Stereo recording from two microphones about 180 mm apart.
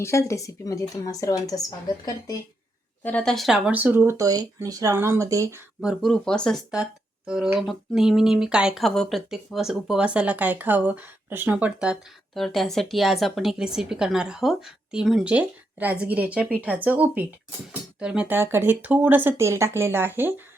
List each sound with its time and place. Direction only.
0.0 s speech: 15° left (ahead or behind)
3.0 s speech: 10° left (ahead or behind); by 5.6 s 15° right (ahead or behind)
5.8 s speech: centre (ahead or behind)